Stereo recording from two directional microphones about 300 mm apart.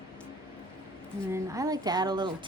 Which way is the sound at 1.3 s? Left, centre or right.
Centre.